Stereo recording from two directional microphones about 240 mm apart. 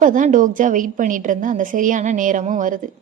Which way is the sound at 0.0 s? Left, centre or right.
Right.